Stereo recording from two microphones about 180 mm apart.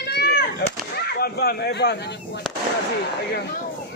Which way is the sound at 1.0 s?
60° left (ahead or behind).